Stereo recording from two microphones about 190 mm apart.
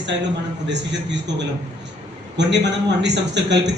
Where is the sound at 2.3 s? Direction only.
65° right (ahead or behind).